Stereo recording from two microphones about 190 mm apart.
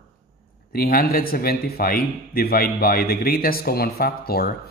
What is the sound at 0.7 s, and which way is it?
A man's voice, 50° left (ahead or behind).